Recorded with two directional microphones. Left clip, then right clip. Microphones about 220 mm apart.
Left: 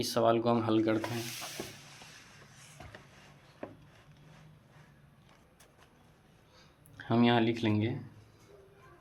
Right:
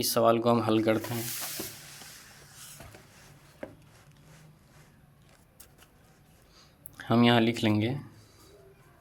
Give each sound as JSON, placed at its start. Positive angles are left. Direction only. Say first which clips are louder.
{"t": 0.0, "sound": "speech", "louder": "right 4 dB", "side_deg": -20}
{"t": 6.9, "sound": "speech", "louder": "right 4 dB", "side_deg": -30}